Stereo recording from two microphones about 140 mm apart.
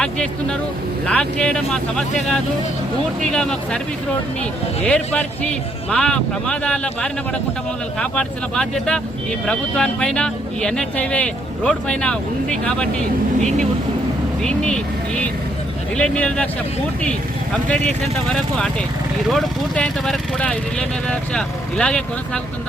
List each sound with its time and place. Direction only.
0.0 s speech: 5° left (ahead or behind)
4.8 s speech: 10° left (ahead or behind)
14.4 s speech: 5° left (ahead or behind)
17.7 s speech: 5° left (ahead or behind)